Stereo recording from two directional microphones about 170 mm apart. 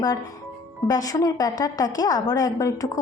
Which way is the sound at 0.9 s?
20° left (ahead or behind).